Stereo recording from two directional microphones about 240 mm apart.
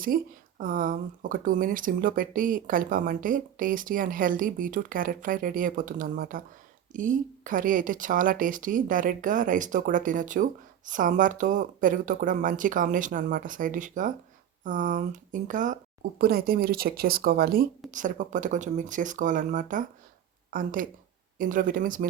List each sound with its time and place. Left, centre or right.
0.1 s speech: right